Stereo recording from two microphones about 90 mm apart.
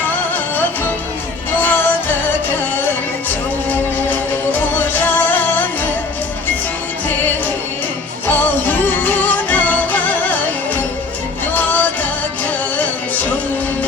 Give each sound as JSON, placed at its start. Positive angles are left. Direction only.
{"t": 1.5, "sound": "music", "side_deg": 20}
{"t": 4.8, "sound": "music", "side_deg": 20}
{"t": 8.3, "sound": "music", "side_deg": 20}
{"t": 11.5, "sound": "music", "side_deg": 20}